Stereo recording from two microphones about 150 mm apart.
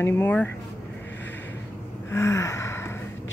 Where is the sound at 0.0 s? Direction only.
15° left (ahead or behind).